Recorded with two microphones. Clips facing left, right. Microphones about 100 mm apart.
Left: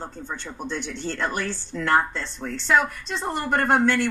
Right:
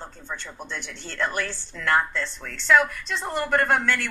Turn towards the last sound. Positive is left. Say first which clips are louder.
# left 3 dB
turn(degrees=30)  # may be behind; listen again after turning